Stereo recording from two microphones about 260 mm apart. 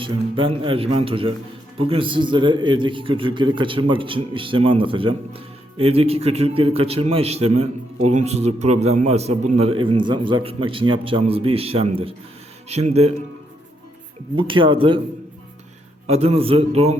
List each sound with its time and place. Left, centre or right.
0.0 s a man's voice: centre
14.3 s a man's voice: centre
16.0 s a man's voice: right